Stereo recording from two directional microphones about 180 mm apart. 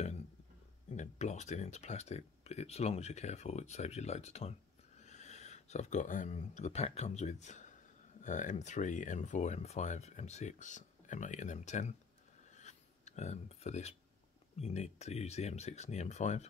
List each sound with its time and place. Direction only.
0.9 s speech: 40° left (ahead or behind)
12.5 s a sound: 40° left (ahead or behind)
14.6 s speech: 40° left (ahead or behind)